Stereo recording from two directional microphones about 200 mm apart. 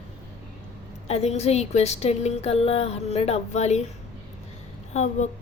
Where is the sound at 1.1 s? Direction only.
30° left (ahead or behind).